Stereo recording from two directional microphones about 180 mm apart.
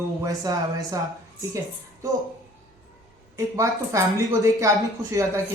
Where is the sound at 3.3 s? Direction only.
15° right (ahead or behind).